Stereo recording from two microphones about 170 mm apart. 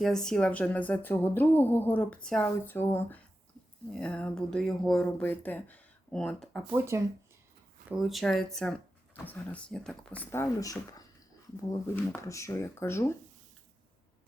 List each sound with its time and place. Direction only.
0.0 s speech: 5° left (ahead or behind)
6.7 s speech: 15° right (ahead or behind)
7.9 s speech: 5° right (ahead or behind); by 13.1 s 15° left (ahead or behind)